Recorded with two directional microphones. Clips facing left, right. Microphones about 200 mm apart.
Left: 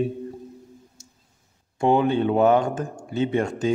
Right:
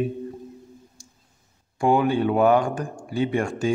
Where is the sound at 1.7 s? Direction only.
25° left (ahead or behind).